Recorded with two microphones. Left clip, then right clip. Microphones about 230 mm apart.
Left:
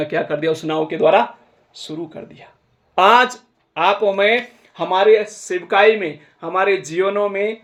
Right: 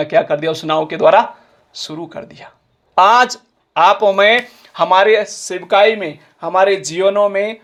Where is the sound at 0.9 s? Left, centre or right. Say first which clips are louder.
Right 3 dB; right.